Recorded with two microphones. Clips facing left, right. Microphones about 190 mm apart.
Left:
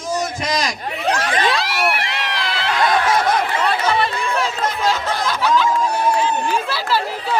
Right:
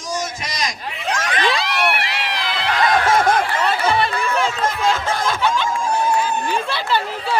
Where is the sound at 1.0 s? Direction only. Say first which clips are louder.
Left 2 dB; 35° left (ahead or behind).